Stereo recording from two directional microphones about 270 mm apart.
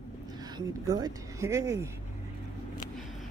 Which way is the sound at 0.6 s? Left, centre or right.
Centre.